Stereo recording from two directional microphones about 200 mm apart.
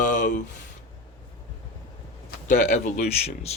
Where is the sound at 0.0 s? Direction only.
40° left (ahead or behind).